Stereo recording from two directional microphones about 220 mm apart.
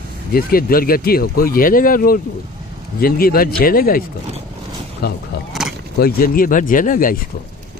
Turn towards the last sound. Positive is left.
turn(degrees=40)  # may be behind; listen again after turning